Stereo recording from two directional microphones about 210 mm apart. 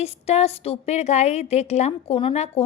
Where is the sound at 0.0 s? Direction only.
30° left (ahead or behind).